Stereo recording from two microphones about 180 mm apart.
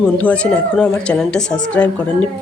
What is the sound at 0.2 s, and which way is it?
A woman's voice, 5° left (ahead or behind).